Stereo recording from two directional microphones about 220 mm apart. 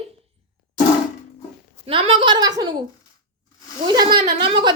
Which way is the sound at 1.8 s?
25° right (ahead or behind).